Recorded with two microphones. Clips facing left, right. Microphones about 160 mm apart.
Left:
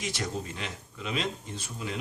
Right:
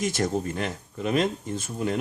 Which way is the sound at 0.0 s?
45° right (ahead or behind).